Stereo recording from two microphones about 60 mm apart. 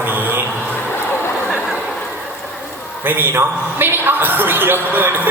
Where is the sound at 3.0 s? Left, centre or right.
Right.